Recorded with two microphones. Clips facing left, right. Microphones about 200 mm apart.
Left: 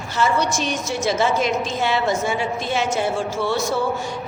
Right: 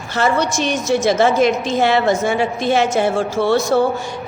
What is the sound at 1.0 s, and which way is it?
A woman's voice, 80° right.